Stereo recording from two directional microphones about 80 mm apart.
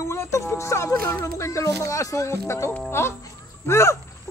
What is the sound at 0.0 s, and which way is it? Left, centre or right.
Speech, left.